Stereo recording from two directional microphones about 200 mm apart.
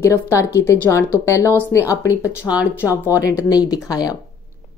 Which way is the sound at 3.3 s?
15° left (ahead or behind).